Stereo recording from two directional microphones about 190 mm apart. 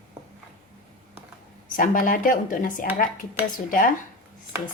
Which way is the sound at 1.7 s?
45° left (ahead or behind).